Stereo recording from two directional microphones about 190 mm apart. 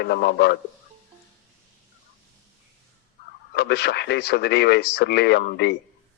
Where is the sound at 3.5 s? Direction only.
60° left (ahead or behind).